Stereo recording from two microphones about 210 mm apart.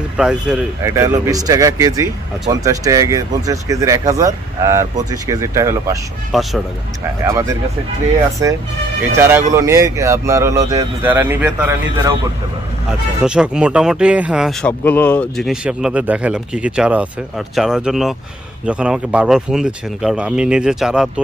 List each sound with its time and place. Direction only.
0.2 s speech: 5° right (ahead or behind)
0.8 s speech: 15° right (ahead or behind)
6.3 s speech: centre (ahead or behind)
7.2 s speech: 15° right (ahead or behind)
13.2 s speech: 5° right (ahead or behind)
14.7 s speech: 10° left (ahead or behind)